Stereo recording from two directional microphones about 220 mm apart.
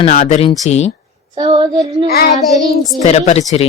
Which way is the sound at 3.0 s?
30° left (ahead or behind).